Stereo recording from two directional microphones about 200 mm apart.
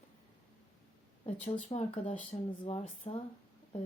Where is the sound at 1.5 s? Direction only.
35° left (ahead or behind).